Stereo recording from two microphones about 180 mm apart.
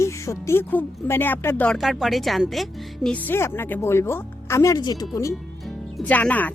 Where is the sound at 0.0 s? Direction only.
15° left (ahead or behind).